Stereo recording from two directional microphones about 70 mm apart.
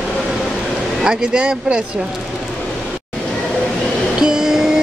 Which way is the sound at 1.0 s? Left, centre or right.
Centre.